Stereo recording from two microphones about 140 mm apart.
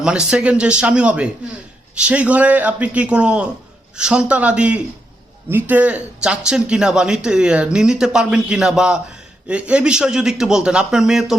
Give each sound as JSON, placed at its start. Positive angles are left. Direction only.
{"t": 0.0, "sound": "a man's voice", "side_deg": -5}